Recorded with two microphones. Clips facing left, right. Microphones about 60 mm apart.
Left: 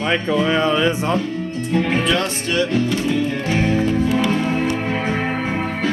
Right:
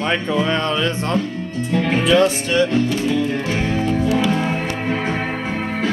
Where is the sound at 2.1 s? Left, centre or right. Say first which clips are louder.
Right 5 dB; right.